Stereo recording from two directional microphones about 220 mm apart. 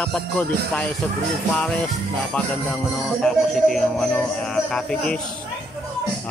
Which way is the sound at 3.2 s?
Centre (ahead or behind).